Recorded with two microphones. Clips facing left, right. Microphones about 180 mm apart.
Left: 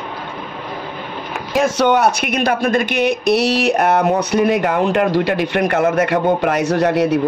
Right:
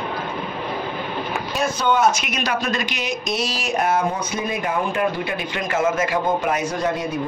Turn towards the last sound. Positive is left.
turn(degrees=75)  # may be behind; listen again after turning